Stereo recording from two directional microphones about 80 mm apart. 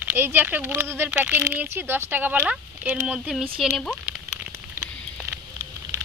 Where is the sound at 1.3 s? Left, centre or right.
Right.